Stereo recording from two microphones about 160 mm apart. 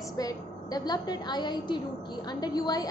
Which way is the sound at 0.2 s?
25° left (ahead or behind).